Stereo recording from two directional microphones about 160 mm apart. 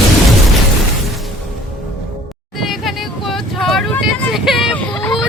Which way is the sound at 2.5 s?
Centre (ahead or behind).